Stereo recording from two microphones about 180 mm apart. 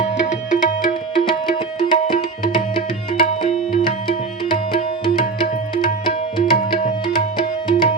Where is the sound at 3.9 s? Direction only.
25° left (ahead or behind).